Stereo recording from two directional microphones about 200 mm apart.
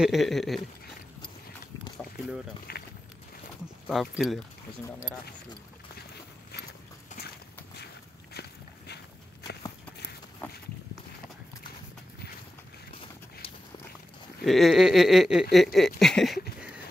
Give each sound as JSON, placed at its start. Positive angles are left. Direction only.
{"t": 0.0, "sound": "speech", "side_deg": 0}
{"t": 2.7, "sound": "walk", "side_deg": 50}
{"t": 3.8, "sound": "speech", "side_deg": 0}
{"t": 7.7, "sound": "walk", "side_deg": 55}
{"t": 14.4, "sound": "speech", "side_deg": 0}